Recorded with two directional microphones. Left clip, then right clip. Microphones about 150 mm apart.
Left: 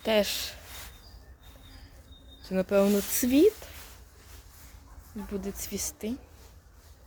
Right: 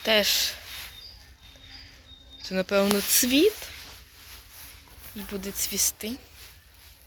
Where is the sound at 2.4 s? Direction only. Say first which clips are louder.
Right 1 dB; 15° left (ahead or behind).